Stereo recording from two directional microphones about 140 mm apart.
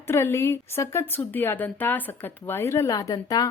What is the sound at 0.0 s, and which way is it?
Speech, 15° left (ahead or behind).